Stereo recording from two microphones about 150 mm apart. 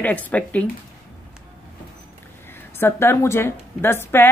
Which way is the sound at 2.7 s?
15° left (ahead or behind).